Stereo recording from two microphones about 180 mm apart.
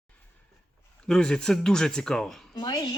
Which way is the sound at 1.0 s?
5° left (ahead or behind).